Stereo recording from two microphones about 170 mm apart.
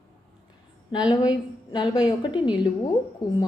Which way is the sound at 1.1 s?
25° left (ahead or behind).